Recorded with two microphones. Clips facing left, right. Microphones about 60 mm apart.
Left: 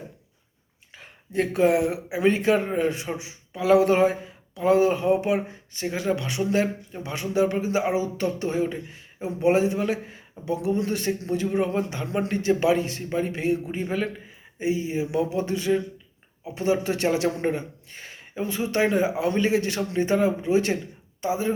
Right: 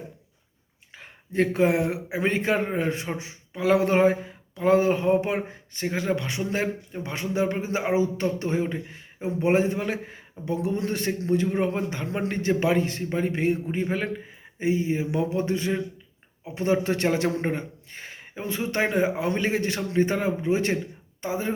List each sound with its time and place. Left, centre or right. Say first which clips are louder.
0.9 s speech: right 2 dB; right